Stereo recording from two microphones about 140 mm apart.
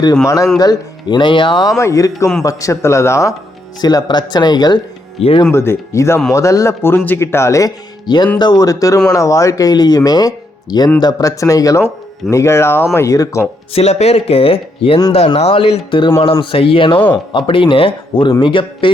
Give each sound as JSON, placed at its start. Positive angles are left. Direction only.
{"t": 0.6, "sound": "speech", "side_deg": 30}
{"t": 1.8, "sound": "speech", "side_deg": 20}
{"t": 5.5, "sound": "speech", "side_deg": 15}
{"t": 13.7, "sound": "speech", "side_deg": 50}